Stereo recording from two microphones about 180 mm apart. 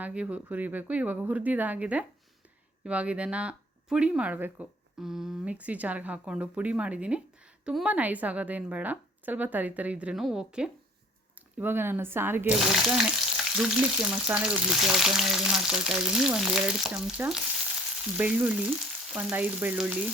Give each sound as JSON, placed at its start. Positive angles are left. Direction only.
{"t": 0.0, "sound": "speech", "side_deg": -5}
{"t": 13.3, "sound": "frying", "side_deg": -5}
{"t": 18.2, "sound": "speech", "side_deg": -10}